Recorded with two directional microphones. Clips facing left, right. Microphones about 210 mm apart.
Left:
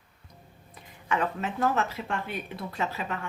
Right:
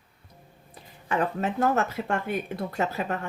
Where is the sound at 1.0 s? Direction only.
40° right (ahead or behind).